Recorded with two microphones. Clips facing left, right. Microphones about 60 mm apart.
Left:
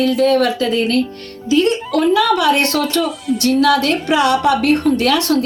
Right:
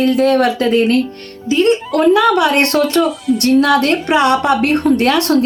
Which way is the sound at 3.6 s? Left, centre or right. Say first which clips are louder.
Right 1 dB; right.